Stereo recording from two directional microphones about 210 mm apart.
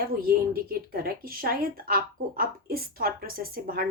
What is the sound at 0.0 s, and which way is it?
Speech, 45° right (ahead or behind).